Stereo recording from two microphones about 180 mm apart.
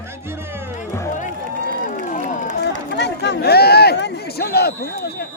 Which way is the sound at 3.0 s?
70° left (ahead or behind).